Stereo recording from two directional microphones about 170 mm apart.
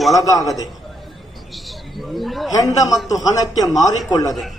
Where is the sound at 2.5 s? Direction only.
20° left (ahead or behind).